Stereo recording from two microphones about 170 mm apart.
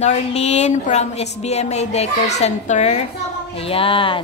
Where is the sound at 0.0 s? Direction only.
40° left (ahead or behind).